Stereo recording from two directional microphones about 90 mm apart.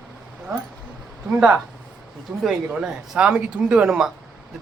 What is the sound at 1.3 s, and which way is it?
A man's voice, 10° right (ahead or behind).